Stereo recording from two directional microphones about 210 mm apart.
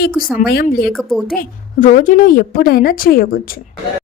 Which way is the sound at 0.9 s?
Centre (ahead or behind).